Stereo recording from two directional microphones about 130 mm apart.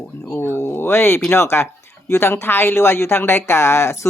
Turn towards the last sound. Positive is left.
turn(degrees=20)  # may be behind; listen again after turning